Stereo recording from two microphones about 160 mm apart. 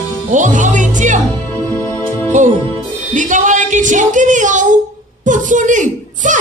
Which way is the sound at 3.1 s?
50° right (ahead or behind).